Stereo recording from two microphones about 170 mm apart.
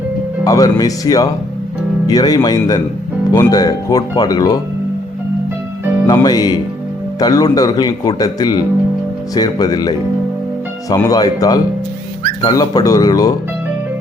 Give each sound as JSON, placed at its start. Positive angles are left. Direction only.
{"t": 0.4, "sound": "speech", "side_deg": 20}
{"t": 6.1, "sound": "speech", "side_deg": 25}